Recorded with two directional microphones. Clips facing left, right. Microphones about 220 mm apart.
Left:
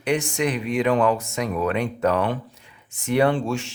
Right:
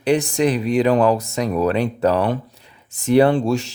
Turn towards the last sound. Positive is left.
turn(degrees=-35)  # may be behind; listen again after turning